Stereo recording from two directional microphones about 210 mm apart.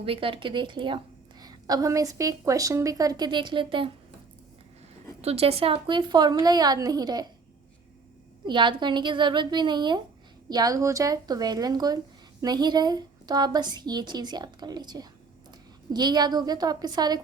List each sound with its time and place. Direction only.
0.0 s a woman's voice: 25° right (ahead or behind)
5.2 s a woman's voice: 30° right (ahead or behind)
8.4 s a woman's voice: 20° right (ahead or behind)